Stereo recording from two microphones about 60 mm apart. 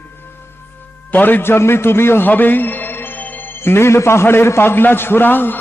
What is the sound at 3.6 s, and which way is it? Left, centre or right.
A man's voice, left.